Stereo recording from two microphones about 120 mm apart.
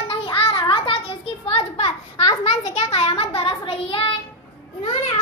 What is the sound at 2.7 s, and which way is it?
Child singing, 55° left (ahead or behind).